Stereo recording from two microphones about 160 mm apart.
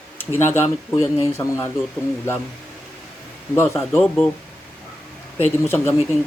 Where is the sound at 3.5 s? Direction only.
15° left (ahead or behind).